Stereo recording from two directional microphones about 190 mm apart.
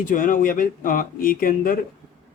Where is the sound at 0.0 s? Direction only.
45° left (ahead or behind).